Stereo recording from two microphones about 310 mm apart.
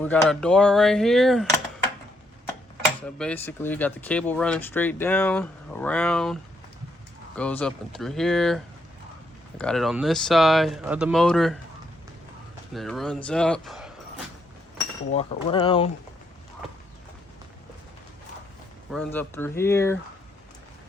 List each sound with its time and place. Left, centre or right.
0.0 s speech: centre
3.2 s speech: centre
12.7 s speech: centre
15.1 s speech: centre
18.9 s speech: centre